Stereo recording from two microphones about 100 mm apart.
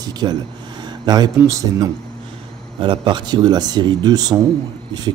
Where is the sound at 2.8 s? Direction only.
55° right (ahead or behind).